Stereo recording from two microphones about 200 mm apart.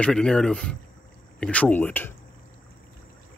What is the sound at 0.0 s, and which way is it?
Speech, 5° left (ahead or behind).